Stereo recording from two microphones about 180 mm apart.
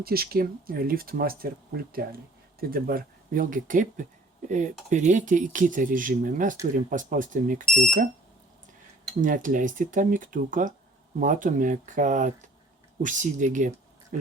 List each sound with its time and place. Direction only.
0.0 s speech: 55° right (ahead or behind)
9.2 s speech: 50° right (ahead or behind)